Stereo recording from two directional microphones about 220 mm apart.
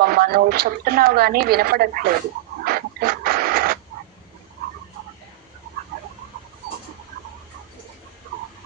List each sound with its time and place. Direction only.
0.0 s speech: 45° right (ahead or behind)
2.6 s printer: 45° right (ahead or behind)